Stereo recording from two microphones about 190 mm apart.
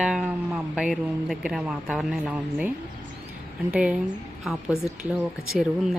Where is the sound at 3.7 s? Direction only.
5° right (ahead or behind).